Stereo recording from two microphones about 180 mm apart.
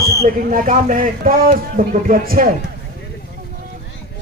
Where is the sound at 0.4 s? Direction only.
50° right (ahead or behind).